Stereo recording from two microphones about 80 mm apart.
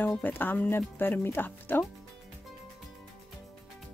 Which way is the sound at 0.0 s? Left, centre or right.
Left.